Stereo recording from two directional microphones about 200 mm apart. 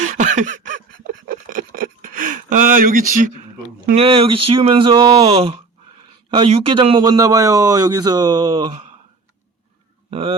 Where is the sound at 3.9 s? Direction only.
30° right (ahead or behind).